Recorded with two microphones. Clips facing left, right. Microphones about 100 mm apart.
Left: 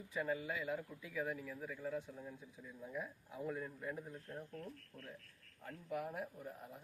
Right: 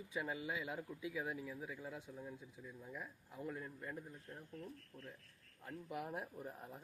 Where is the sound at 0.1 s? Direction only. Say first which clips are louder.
Left 3 dB; 15° right (ahead or behind).